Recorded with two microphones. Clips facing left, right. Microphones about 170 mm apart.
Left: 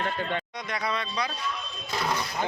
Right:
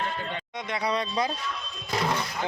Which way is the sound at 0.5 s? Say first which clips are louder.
Right 3 dB; 30° right (ahead or behind).